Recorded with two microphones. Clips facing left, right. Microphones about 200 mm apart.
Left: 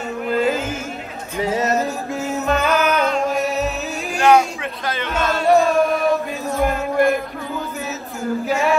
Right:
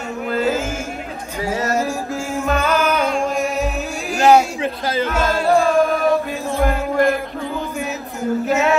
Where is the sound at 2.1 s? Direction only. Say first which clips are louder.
Left 2 dB; 10° right (ahead or behind).